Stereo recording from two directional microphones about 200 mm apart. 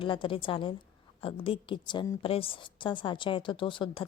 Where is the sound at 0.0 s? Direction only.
25° left (ahead or behind).